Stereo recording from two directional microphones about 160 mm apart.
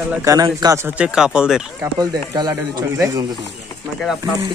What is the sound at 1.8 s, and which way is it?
Speech, 25° right (ahead or behind).